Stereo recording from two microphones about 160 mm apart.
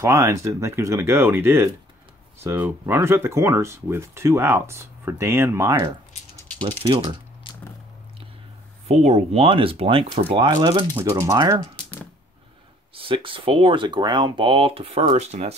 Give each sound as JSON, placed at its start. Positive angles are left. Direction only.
{"t": 0.0, "sound": "speech", "side_deg": -20}
{"t": 6.9, "sound": "speech", "side_deg": -30}
{"t": 7.5, "sound": "biting", "side_deg": 30}
{"t": 8.8, "sound": "speech", "side_deg": -40}
{"t": 11.0, "sound": "speech", "side_deg": -15}
{"t": 12.9, "sound": "speech", "side_deg": -35}